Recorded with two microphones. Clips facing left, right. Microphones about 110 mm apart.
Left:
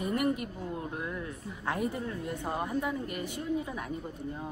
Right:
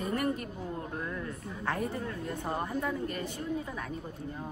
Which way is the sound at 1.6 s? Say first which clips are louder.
Left 1 dB; 15° left (ahead or behind).